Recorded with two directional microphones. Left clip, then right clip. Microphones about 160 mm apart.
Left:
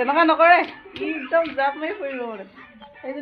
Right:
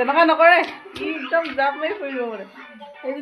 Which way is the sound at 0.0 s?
10° left (ahead or behind).